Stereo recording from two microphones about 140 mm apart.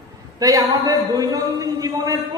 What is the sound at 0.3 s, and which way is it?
A man's voice, 25° right (ahead or behind).